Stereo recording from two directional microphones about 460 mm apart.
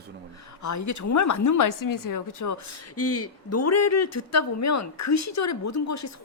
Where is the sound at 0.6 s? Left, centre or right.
Left.